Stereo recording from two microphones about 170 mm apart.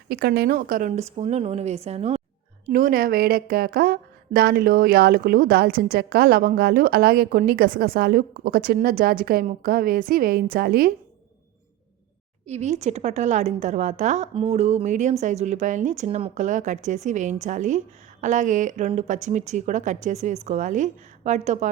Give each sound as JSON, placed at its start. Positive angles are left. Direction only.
{"t": 0.1, "sound": "a woman's voice", "side_deg": -65}
{"t": 2.6, "sound": "speech", "side_deg": -55}
{"t": 12.5, "sound": "a woman's voice", "side_deg": -40}